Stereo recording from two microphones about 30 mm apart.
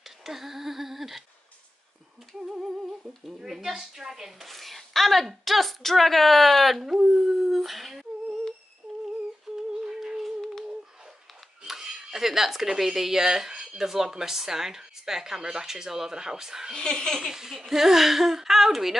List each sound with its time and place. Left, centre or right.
0.2 s speech: centre
2.3 s humming: centre
3.3 s speech: centre
4.5 s a woman's voice: centre
7.2 s howl: centre
9.5 s humming: centre
9.8 s a sound: centre
11.6 s speech: centre
13.5 s a sound: right
13.8 s speech: centre
16.7 s a child's voice: left
17.3 s speech: centre